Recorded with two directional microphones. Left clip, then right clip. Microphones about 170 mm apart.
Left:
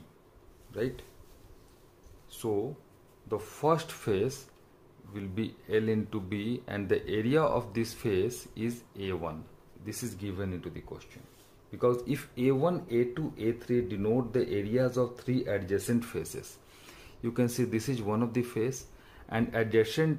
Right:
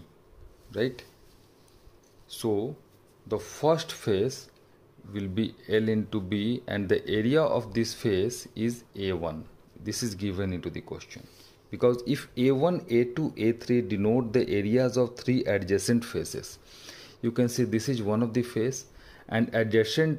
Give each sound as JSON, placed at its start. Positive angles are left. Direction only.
{"t": 0.7, "sound": "speech", "side_deg": -40}
{"t": 3.3, "sound": "speech", "side_deg": -25}
{"t": 11.9, "sound": "speech", "side_deg": -30}